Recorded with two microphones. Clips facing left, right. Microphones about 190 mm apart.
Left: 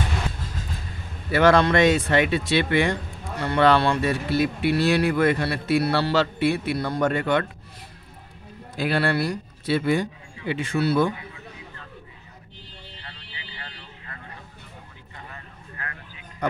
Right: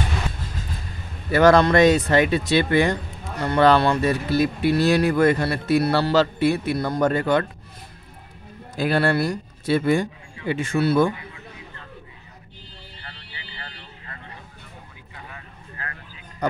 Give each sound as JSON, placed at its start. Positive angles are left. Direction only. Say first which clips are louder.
{"t": 1.3, "sound": "speech", "louder": "right 3 dB", "side_deg": -40}
{"t": 8.7, "sound": "speech", "louder": "right 3 dB", "side_deg": -45}
{"t": 13.0, "sound": "vehicle", "louder": "right 1 dB", "side_deg": -45}
{"t": 15.7, "sound": "a sound", "louder": "right 1 dB", "side_deg": -30}